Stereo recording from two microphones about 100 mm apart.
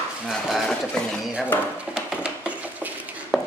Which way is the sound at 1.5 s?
20° left (ahead or behind).